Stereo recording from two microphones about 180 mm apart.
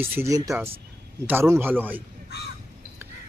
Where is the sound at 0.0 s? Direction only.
15° right (ahead or behind).